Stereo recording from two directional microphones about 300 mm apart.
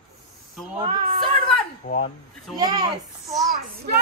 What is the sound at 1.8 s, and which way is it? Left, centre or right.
Speech, left.